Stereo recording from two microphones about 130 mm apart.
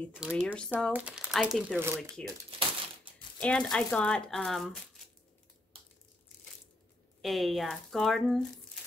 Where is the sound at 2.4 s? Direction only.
45° right (ahead or behind).